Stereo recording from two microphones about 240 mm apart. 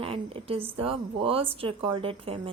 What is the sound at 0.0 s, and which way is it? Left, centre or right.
Speech, right.